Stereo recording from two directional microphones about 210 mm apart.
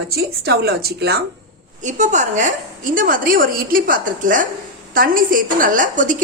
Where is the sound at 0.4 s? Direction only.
50° right (ahead or behind).